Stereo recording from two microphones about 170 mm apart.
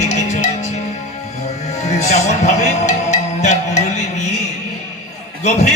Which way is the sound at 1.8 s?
45° left (ahead or behind).